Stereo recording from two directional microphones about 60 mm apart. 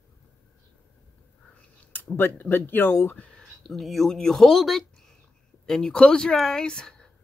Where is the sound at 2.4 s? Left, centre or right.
Left.